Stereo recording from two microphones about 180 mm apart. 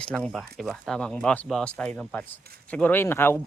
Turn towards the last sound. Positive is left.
turn(degrees=10)  # may be behind; listen again after turning